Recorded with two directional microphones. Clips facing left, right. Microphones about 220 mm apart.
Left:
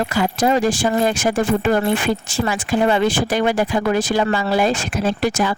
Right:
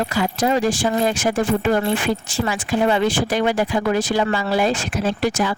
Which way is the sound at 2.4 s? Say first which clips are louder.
Left 1 dB; 45° left (ahead or behind).